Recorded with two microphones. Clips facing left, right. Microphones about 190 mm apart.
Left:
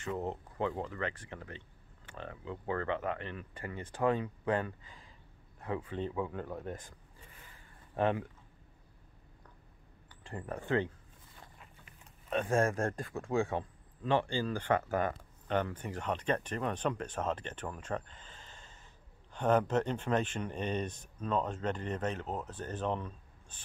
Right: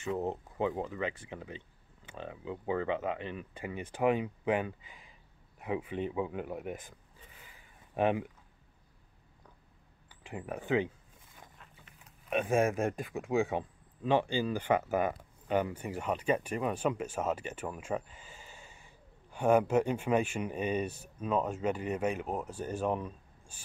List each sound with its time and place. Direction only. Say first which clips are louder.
0.2 s speech: right 3 dB; 15° right (ahead or behind)
7.9 s speech: right 2 dB; 15° right (ahead or behind)
10.0 s speech: right 1 dB; 10° right (ahead or behind)
12.3 s speech: right 2 dB; 10° right (ahead or behind)